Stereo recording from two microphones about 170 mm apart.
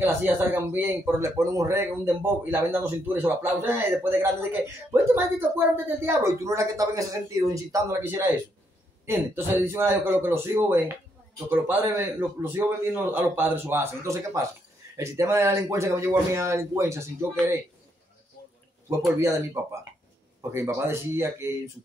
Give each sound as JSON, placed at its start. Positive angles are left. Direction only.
{"t": 0.0, "sound": "speech", "side_deg": -15}
{"t": 18.9, "sound": "speech", "side_deg": -15}